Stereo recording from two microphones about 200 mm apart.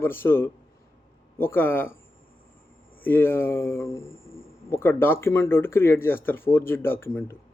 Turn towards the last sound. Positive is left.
turn(degrees=10)  # may be behind; listen again after turning